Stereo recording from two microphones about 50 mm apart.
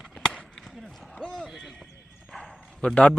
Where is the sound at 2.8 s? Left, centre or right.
Left.